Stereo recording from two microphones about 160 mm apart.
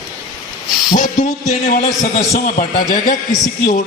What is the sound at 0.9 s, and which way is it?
A man's voice, 50° left (ahead or behind).